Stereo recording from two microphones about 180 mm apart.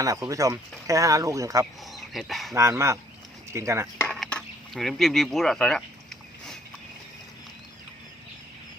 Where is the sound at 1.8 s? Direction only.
Centre (ahead or behind).